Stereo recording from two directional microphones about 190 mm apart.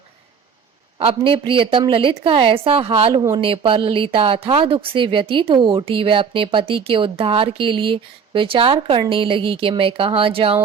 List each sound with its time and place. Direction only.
0.9 s speech: 30° right (ahead or behind)